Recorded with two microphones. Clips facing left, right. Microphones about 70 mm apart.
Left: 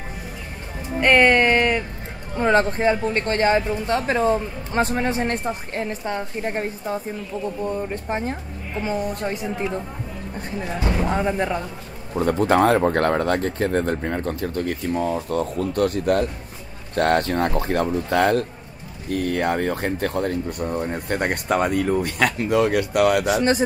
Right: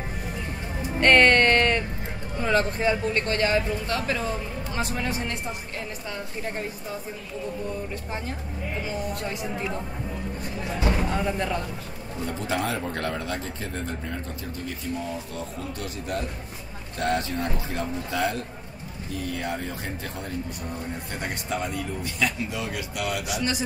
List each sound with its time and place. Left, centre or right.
1.0 s a sound: centre
2.3 s speech: left
11.1 s speech: left
12.2 s speech: left
23.3 s speech: left